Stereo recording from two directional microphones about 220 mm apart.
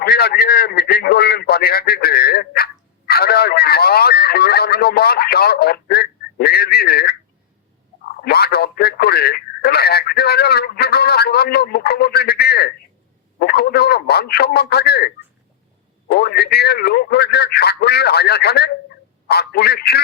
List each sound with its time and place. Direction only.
0.0 s speech: 45° left (ahead or behind)
8.2 s speech: 45° left (ahead or behind)